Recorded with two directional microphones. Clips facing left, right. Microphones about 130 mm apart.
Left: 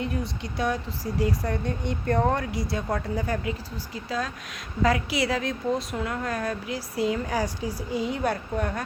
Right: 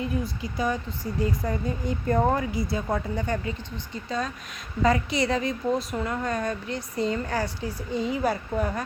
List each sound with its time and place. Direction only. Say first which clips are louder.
0.0 s speech: right 1 dB; centre (ahead or behind)
1.0 s speech: left 1 dB; 80° left
1.5 s speech: even; 5° right (ahead or behind)